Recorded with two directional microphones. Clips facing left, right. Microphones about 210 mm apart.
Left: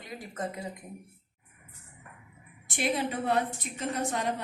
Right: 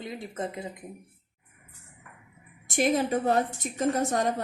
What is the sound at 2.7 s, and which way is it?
A woman's voice, 45° right (ahead or behind).